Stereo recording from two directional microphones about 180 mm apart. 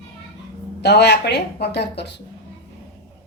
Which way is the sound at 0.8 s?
70° left (ahead or behind).